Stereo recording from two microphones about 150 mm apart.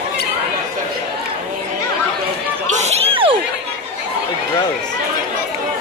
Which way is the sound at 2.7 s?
45° right (ahead or behind).